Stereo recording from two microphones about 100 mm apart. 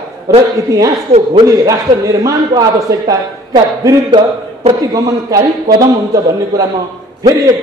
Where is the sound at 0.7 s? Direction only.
35° right (ahead or behind).